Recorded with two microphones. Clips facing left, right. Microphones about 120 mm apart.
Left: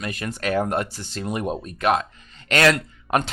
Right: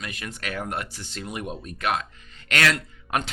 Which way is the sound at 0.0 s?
45° left (ahead or behind).